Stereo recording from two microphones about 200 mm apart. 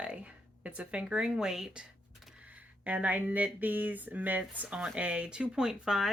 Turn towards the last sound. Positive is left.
turn(degrees=0)  # may be behind; listen again after turning